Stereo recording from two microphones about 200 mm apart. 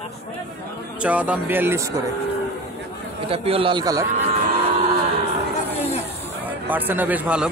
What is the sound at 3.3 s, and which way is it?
Speech, 30° right (ahead or behind).